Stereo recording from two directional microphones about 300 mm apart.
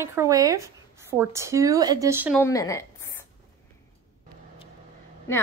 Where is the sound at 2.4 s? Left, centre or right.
Centre.